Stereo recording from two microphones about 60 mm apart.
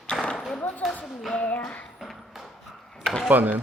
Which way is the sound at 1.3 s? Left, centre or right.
Left.